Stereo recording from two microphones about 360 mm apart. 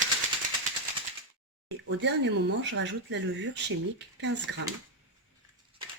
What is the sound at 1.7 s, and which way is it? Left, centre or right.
Speech, right.